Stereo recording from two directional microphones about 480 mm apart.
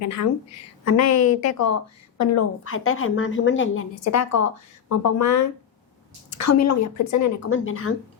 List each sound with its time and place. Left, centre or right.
0.0 s a woman's voice: left
1.1 s a woman's voice: left
1.5 s a woman's voice: left